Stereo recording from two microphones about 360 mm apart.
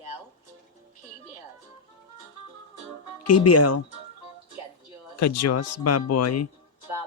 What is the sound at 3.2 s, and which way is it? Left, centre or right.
Speech, left.